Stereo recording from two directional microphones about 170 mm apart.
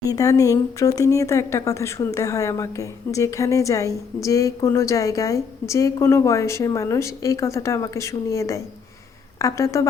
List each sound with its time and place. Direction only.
0.1 s speech: 20° left (ahead or behind)